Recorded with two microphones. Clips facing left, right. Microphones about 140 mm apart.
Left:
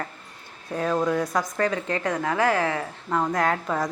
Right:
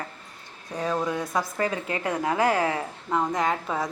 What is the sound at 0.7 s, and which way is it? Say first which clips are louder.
A woman's voice: left 3 dB; centre (ahead or behind).